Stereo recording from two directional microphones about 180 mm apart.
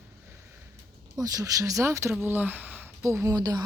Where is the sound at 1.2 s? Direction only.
20° right (ahead or behind).